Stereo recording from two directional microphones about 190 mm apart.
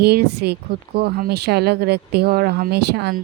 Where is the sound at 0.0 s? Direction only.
60° right (ahead or behind).